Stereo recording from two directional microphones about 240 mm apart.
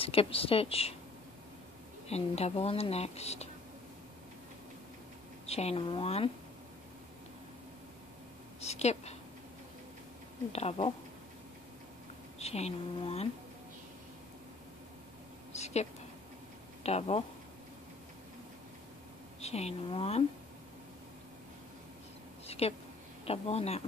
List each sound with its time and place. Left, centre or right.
0.0 s a woman's voice: left
2.0 s a woman's voice: left
5.5 s a woman's voice: left
8.5 s a woman's voice: left
10.5 s a woman's voice: left
12.4 s a woman's voice: left
15.5 s a sound: left
16.8 s a woman's voice: left
19.4 s a woman's voice: left
22.5 s a sound: left
23.2 s a woman's voice: left